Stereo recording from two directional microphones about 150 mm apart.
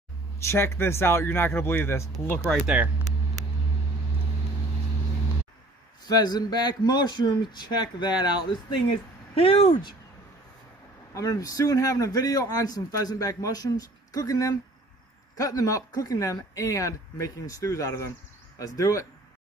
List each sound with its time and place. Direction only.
0.5 s speech: 15° left (ahead or behind)
3.0 s vehicle: 50° right (ahead or behind)
6.0 s a man's voice: 25° left (ahead or behind)
11.1 s a man's voice: 20° left (ahead or behind)